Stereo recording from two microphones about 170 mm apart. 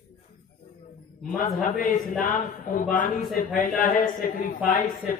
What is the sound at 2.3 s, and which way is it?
A man's voice, 55° left (ahead or behind).